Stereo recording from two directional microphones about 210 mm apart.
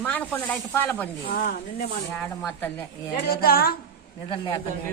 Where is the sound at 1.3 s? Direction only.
45° left (ahead or behind).